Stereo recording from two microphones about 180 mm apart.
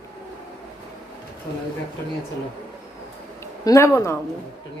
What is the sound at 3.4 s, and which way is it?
Speech, 15° left (ahead or behind).